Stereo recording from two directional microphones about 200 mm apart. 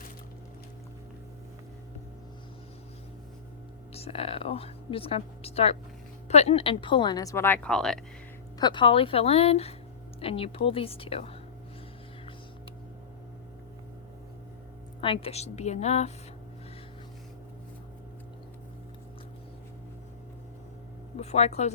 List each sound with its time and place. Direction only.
3.9 s a woman's voice: 30° left (ahead or behind); by 7.9 s 5° left (ahead or behind)
8.5 s a woman's voice: 20° left (ahead or behind)
15.0 s a woman's voice: 30° left (ahead or behind)
21.2 s speech: 30° left (ahead or behind)